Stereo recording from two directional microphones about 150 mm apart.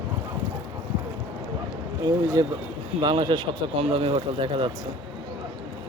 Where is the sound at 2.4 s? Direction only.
25° right (ahead or behind).